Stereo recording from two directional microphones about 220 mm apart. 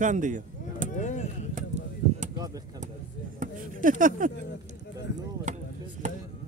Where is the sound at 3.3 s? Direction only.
35° right (ahead or behind).